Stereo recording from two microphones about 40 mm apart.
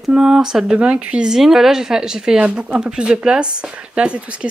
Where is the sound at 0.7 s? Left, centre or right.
Right.